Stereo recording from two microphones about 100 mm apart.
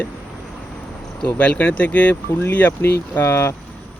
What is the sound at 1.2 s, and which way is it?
Speech, 15° left (ahead or behind).